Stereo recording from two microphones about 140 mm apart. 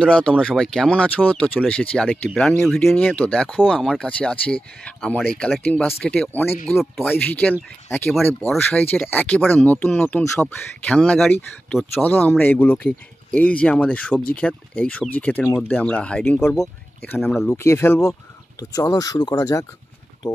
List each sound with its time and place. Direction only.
0.0 s speech: 10° left (ahead or behind)
8.5 s speech: 15° left (ahead or behind)